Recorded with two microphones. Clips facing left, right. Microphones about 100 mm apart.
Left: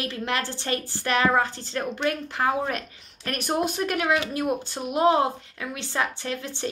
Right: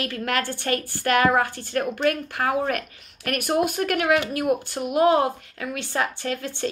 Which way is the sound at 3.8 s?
60° right (ahead or behind).